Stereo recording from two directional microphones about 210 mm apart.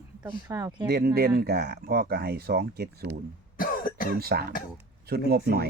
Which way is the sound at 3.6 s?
40° left (ahead or behind).